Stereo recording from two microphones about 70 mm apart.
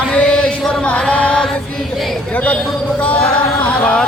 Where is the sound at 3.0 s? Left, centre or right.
Centre.